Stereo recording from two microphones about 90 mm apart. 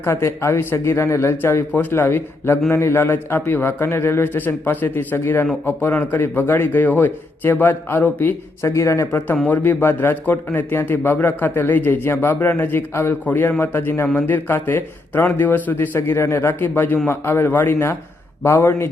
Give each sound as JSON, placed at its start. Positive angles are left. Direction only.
{"t": 0.0, "sound": "a man's voice", "side_deg": 30}
{"t": 8.7, "sound": "speech", "side_deg": 35}
{"t": 9.5, "sound": "a man's voice", "side_deg": 25}